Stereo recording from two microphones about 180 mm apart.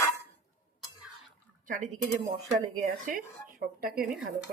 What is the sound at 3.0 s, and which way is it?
Speech, 50° right (ahead or behind).